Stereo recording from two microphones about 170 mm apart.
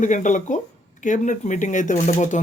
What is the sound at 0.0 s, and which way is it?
Speech, 45° left (ahead or behind).